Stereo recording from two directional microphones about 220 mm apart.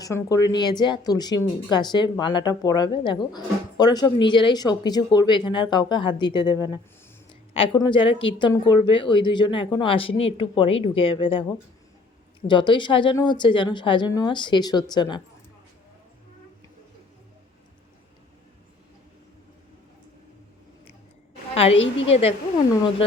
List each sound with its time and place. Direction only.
0.0 s a woman's voice: 15° left (ahead or behind)
21.5 s a woman's voice: 25° left (ahead or behind)